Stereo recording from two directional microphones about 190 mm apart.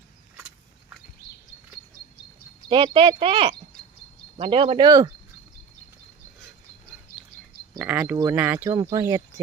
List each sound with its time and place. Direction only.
2.6 s speech: 25° right (ahead or behind)
7.8 s speech: 10° right (ahead or behind)
8.7 s speech: 20° right (ahead or behind)